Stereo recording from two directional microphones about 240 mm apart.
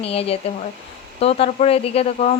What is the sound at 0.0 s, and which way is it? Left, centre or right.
Speech, left.